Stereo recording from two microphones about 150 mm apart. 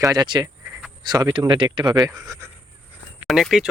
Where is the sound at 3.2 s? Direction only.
Centre (ahead or behind).